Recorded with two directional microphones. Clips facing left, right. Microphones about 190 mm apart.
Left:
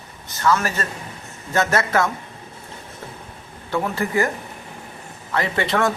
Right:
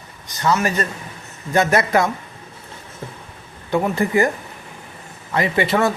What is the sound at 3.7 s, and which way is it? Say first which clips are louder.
Speech: right 4 dB; 15° right (ahead or behind).